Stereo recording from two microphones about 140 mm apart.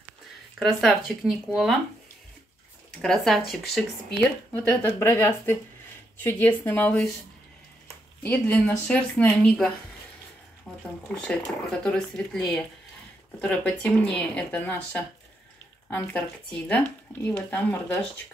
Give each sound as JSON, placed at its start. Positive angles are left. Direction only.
{"t": 0.6, "sound": "speech", "side_deg": 0}
{"t": 3.0, "sound": "speech", "side_deg": 5}
{"t": 4.5, "sound": "speech", "side_deg": 10}
{"t": 8.2, "sound": "speech", "side_deg": 10}
{"t": 10.7, "sound": "a sound", "side_deg": 0}
{"t": 11.1, "sound": "speech", "side_deg": 5}